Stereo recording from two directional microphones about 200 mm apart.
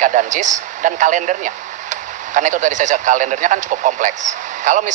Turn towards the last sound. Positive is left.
turn(degrees=-40)  # may be behind; listen again after turning